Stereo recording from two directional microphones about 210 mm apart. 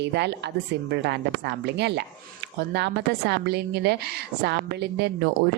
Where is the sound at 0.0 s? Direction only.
55° right (ahead or behind).